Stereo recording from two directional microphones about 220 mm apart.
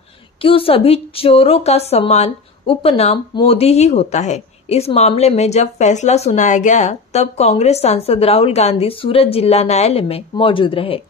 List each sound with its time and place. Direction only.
0.4 s a woman's voice: 25° left (ahead or behind)